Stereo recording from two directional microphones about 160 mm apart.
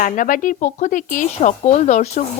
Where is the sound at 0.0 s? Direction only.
55° left (ahead or behind).